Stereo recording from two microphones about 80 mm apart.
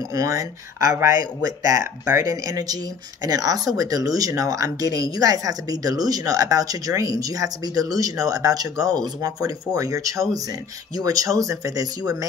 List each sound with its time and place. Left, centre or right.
0.1 s speech: right